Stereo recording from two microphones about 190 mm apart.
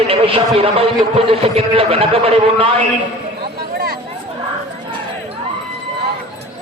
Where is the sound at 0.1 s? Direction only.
30° right (ahead or behind).